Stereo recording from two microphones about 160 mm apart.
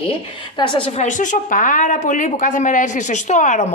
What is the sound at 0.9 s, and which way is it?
Speech, 50° left (ahead or behind).